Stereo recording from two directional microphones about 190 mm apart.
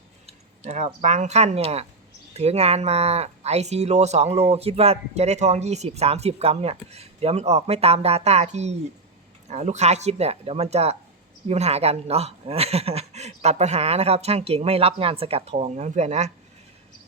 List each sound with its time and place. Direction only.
0.3 s speech: 35° right (ahead or behind)